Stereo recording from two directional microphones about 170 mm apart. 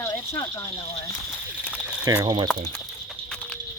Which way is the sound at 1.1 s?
15° left (ahead or behind).